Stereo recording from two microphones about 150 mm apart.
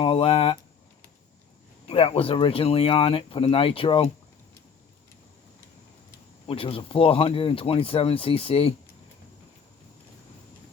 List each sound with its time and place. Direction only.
0.0 s speech: 40° left (ahead or behind)
1.9 s speech: 40° left (ahead or behind)
6.5 s speech: 40° left (ahead or behind)